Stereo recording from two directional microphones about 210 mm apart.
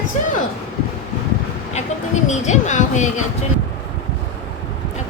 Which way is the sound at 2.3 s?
35° left (ahead or behind).